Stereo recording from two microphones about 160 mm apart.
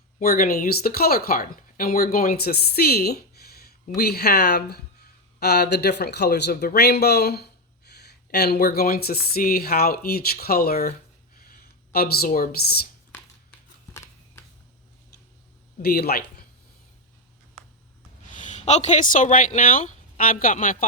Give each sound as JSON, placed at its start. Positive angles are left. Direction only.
{"t": 0.2, "sound": "speech", "side_deg": 65}
{"t": 13.1, "sound": "a sound", "side_deg": 10}
{"t": 15.8, "sound": "speech", "side_deg": 75}
{"t": 18.3, "sound": "speech", "side_deg": 50}